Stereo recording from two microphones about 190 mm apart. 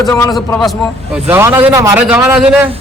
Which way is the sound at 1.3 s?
15° right (ahead or behind).